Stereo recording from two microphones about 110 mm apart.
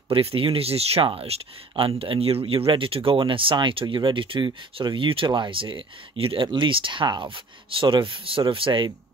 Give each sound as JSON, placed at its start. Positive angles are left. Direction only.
{"t": 0.1, "sound": "speech", "side_deg": -55}